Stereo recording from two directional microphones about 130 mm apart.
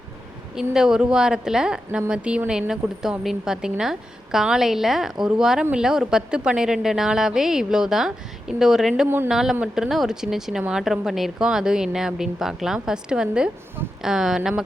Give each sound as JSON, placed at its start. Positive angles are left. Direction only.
{"t": 0.5, "sound": "a woman's voice", "side_deg": -5}
{"t": 9.0, "sound": "speech", "side_deg": -15}
{"t": 9.3, "sound": "a woman's voice", "side_deg": -5}